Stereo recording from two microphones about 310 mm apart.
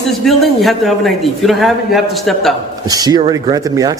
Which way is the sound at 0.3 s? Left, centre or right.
Centre.